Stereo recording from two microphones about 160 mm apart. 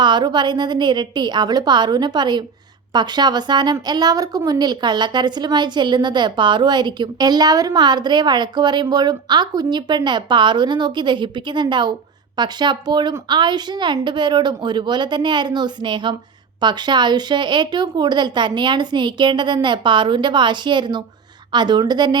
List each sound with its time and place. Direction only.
0.0 s a woman's voice: 30° right (ahead or behind)